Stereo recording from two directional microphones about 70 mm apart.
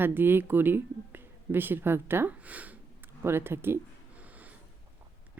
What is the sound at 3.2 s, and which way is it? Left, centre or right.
Speech, right.